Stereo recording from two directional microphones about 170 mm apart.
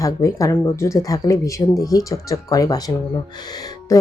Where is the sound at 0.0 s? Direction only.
20° left (ahead or behind).